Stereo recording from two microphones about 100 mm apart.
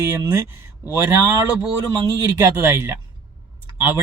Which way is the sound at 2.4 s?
25° right (ahead or behind).